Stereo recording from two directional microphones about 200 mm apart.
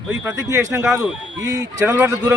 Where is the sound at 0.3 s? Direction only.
15° right (ahead or behind).